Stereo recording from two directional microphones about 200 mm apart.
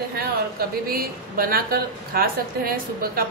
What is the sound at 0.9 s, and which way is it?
A woman's voice, 50° right (ahead or behind).